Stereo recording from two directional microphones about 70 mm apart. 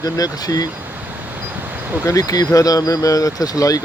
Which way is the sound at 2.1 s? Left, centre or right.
Left.